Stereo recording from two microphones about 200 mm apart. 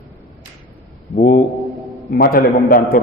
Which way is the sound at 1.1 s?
40° left (ahead or behind).